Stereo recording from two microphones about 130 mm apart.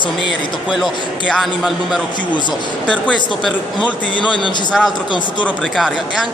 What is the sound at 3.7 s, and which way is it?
Speech, 40° left (ahead or behind).